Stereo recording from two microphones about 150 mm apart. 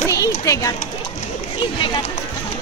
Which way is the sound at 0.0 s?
20° left (ahead or behind).